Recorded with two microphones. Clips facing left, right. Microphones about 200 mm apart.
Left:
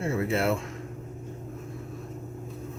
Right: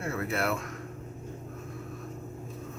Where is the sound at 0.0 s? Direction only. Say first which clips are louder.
Left 5 dB; 25° left (ahead or behind).